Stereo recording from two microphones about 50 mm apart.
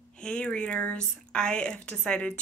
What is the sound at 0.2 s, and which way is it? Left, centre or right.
Speech, centre.